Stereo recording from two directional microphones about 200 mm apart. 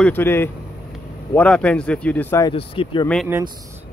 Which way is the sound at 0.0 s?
10° left (ahead or behind).